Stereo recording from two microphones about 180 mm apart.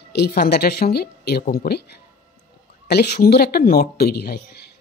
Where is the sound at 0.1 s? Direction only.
60° left (ahead or behind).